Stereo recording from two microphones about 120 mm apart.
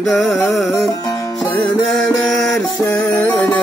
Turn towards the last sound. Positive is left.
turn(degrees=20)  # may be behind; listen again after turning